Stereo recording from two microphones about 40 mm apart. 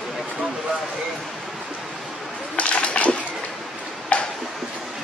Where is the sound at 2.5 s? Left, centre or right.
Left.